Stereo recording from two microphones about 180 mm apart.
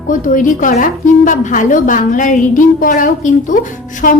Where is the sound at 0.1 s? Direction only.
45° left (ahead or behind).